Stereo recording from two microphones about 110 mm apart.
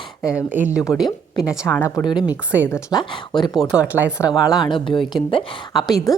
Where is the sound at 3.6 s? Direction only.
10° right (ahead or behind).